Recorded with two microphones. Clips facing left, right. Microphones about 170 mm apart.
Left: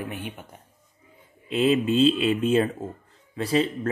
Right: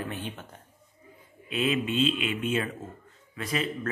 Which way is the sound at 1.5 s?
30° left (ahead or behind).